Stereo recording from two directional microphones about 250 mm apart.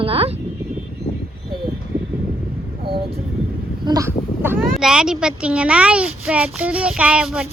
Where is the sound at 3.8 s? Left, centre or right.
Centre.